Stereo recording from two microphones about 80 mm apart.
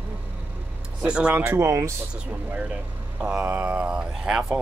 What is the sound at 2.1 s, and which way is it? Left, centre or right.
Speech, right.